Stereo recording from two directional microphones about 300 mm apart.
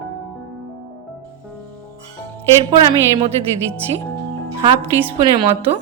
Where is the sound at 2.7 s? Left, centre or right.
Centre.